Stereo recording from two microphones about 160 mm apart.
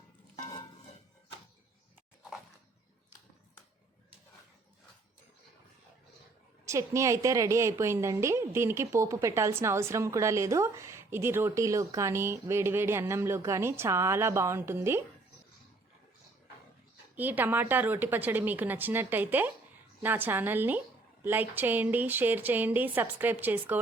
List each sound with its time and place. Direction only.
6.7 s a woman's voice: 20° right (ahead or behind)
17.2 s a woman's voice: 10° right (ahead or behind)